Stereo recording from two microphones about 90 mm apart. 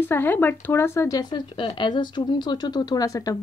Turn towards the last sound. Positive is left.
turn(degrees=40)  # may be behind; listen again after turning